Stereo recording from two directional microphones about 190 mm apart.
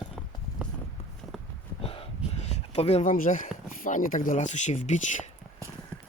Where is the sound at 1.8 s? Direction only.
30° left (ahead or behind).